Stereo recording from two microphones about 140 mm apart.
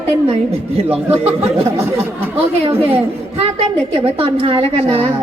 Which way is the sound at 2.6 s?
45° right (ahead or behind).